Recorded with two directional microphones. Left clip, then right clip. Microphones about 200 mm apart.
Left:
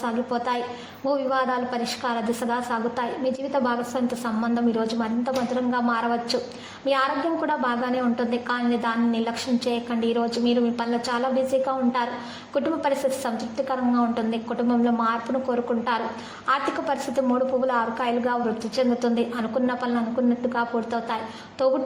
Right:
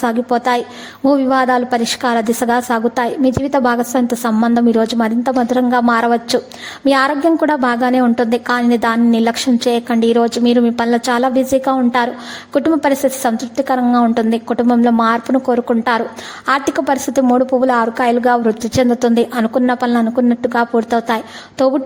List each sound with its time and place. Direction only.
0.0 s a woman's voice: 45° right (ahead or behind)